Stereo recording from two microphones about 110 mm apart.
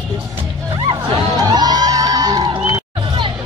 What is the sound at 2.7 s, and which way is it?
Music, 45° right (ahead or behind).